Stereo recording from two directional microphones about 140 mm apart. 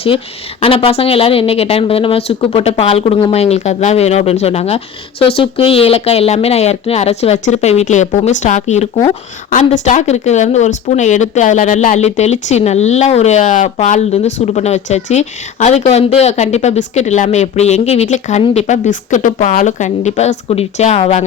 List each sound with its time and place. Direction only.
0.6 s speech: 40° left (ahead or behind); by 13.7 s 65° left (ahead or behind)
13.7 s speech: 55° left (ahead or behind)